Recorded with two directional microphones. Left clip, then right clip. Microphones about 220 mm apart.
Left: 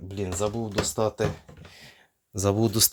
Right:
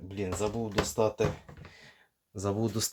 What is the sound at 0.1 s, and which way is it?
Speech, 35° left (ahead or behind).